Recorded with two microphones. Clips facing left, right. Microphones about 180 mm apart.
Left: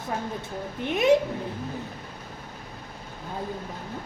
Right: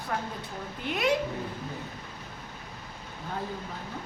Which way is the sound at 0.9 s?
25° left (ahead or behind).